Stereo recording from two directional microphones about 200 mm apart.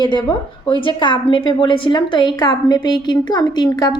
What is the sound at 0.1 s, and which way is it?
A woman's voice, 20° left (ahead or behind).